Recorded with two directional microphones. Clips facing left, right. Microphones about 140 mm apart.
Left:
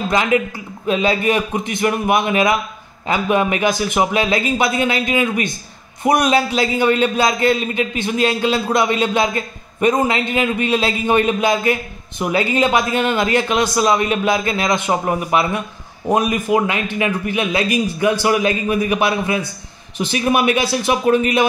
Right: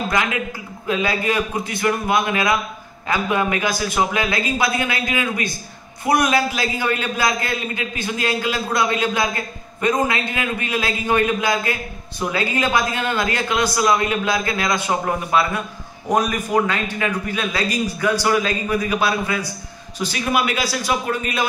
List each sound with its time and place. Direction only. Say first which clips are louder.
0.1 s a man's voice: left 5 dB; 20° left (ahead or behind)